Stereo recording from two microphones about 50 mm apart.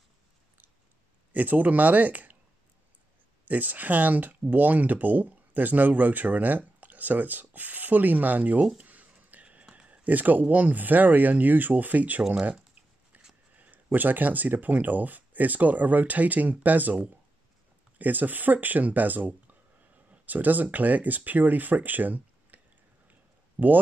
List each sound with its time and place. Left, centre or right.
1.3 s speech: right
3.4 s speech: right
8.8 s a sound: right
10.5 s speech: right
13.1 s a sound: right
13.9 s speech: right
23.6 s speech: right